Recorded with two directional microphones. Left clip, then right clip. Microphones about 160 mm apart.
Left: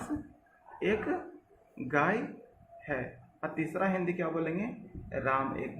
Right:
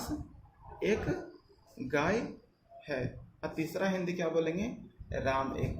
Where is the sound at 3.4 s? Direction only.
40° left (ahead or behind).